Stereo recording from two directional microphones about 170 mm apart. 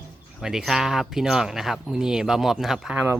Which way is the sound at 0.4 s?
5° right (ahead or behind).